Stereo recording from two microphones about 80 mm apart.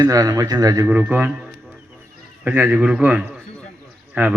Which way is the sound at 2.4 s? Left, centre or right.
Right.